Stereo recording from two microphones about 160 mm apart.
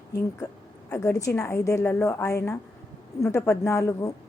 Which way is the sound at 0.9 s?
20° left (ahead or behind).